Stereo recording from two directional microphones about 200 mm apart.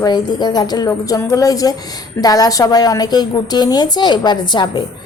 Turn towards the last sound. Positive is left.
turn(degrees=20)  # may be behind; listen again after turning